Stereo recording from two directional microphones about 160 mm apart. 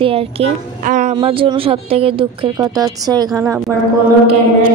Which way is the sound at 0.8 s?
50° right (ahead or behind).